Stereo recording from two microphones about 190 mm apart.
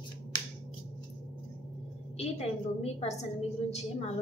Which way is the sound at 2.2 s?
35° left (ahead or behind).